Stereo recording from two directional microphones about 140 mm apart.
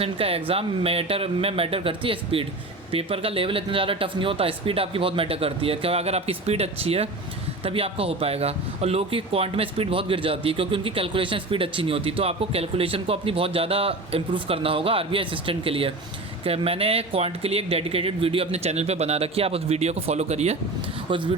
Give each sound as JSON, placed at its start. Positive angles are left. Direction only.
{"t": 0.0, "sound": "speech", "side_deg": -45}